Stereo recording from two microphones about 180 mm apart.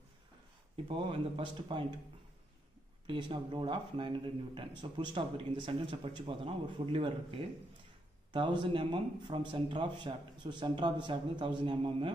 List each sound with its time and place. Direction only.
0.8 s speech: 30° right (ahead or behind)
3.1 s speech: 25° right (ahead or behind)